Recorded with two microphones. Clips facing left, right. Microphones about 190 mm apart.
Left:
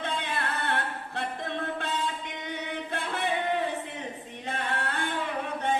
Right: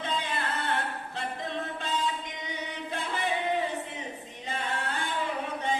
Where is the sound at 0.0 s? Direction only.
60° left (ahead or behind).